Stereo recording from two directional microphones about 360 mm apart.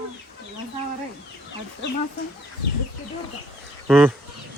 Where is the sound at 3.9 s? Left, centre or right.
Centre.